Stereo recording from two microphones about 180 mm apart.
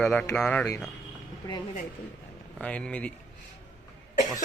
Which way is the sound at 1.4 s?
20° left (ahead or behind).